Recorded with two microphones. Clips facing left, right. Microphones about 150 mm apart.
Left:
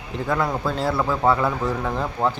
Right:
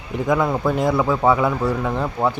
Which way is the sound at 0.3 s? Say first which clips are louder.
Right 4 dB; 10° right (ahead or behind).